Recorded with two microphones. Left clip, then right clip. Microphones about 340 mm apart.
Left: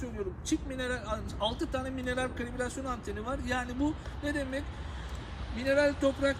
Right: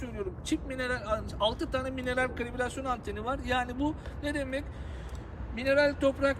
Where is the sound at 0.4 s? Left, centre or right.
Centre.